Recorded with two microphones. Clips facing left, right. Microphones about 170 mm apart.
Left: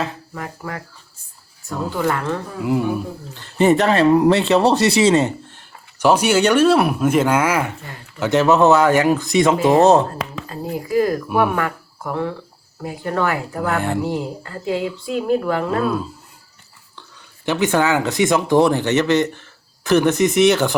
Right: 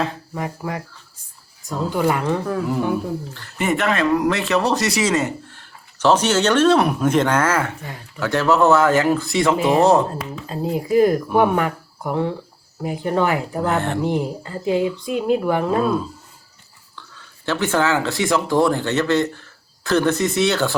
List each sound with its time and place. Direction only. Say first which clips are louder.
0.3 s a woman's voice: right 3 dB; 15° right (ahead or behind)
3.6 s speech: left 6 dB; 35° left (ahead or behind)
10.5 s speech: right 3 dB; 20° right (ahead or behind)
16.9 s speech: right 1 dB; 15° left (ahead or behind)